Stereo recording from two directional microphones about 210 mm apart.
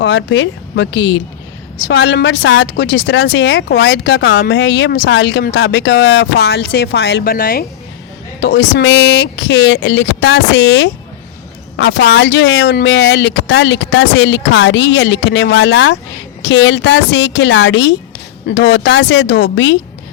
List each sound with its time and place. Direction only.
0.0 s speech: 60° left (ahead or behind); by 7.6 s 45° left (ahead or behind)
8.4 s speech: 60° left (ahead or behind)